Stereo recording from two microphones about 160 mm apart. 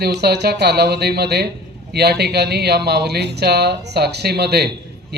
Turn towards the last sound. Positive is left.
turn(degrees=-90)